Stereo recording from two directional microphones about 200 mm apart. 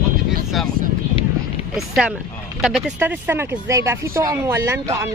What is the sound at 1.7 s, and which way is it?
Speech, centre (ahead or behind).